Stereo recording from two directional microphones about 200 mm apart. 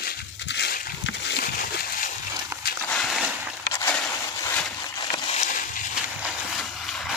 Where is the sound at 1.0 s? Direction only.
60° left (ahead or behind).